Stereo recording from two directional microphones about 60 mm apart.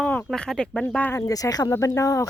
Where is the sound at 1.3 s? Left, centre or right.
Left.